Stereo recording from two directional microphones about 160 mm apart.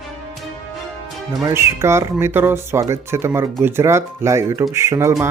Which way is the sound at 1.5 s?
15° right (ahead or behind).